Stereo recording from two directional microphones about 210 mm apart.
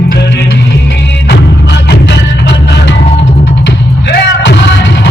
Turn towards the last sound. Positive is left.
turn(degrees=55)  # may be behind; listen again after turning